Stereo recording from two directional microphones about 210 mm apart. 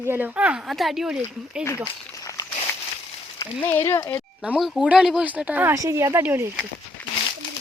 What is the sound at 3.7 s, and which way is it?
Speech, 10° left (ahead or behind).